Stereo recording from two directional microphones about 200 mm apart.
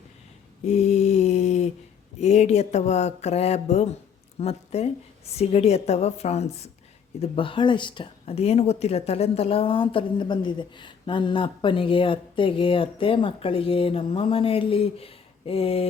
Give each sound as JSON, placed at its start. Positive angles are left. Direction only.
{"t": 0.7, "sound": "mantra", "side_deg": 30}
{"t": 2.2, "sound": "a woman's voice", "side_deg": 35}